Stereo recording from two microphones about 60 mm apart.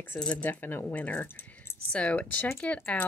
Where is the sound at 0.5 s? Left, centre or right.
Left.